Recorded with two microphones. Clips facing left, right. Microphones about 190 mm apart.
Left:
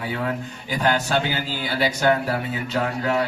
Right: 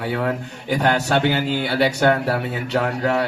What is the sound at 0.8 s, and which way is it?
A man's voice, 65° right (ahead or behind).